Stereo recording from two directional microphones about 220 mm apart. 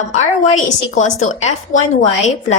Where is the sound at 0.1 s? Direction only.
35° left (ahead or behind).